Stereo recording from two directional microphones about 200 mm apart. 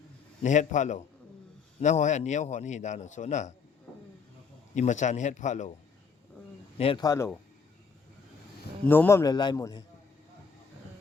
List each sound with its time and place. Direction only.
0.4 s a man's voice: 35° left (ahead or behind)
4.7 s a man's voice: 35° left (ahead or behind)
6.7 s speech: 25° left (ahead or behind)
8.9 s speech: 10° left (ahead or behind)